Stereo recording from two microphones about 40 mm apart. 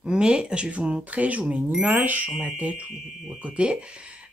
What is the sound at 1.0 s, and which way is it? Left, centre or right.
Speech, right.